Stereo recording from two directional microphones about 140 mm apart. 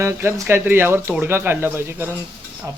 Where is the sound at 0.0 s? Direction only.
20° right (ahead or behind).